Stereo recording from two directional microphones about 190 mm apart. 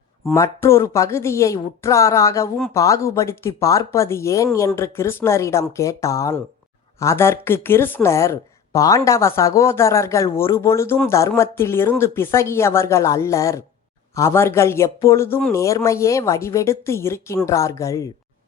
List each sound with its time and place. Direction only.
0.3 s a woman's voice: 15° left (ahead or behind)